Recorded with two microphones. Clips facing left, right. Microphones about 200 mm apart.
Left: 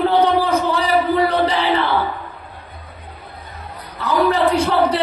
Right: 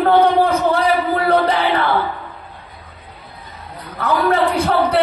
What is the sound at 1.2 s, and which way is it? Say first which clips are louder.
Music: right 2 dB; 55° right (ahead or behind).